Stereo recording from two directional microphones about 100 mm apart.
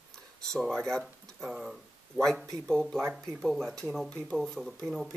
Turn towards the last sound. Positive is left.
turn(degrees=5)  # may be behind; listen again after turning